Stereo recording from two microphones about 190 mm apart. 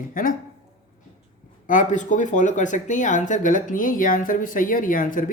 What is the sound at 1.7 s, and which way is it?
A woman's voice, 40° left (ahead or behind).